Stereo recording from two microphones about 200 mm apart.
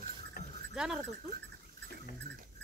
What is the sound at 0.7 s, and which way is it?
Speech, 5° right (ahead or behind).